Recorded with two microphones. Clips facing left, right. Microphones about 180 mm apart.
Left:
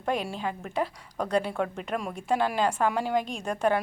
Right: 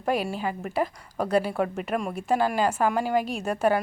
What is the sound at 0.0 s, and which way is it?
A woman's voice, 5° right (ahead or behind).